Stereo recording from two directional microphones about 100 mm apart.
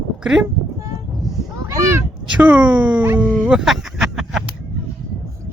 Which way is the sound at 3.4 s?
10° right (ahead or behind).